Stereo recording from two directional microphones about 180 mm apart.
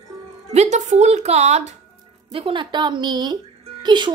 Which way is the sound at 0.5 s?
40° right (ahead or behind).